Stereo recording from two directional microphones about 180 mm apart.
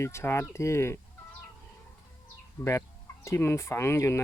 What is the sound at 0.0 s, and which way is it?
Speech, 15° left (ahead or behind).